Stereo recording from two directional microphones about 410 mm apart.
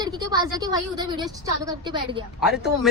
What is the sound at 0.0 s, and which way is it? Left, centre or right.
A woman's voice, centre.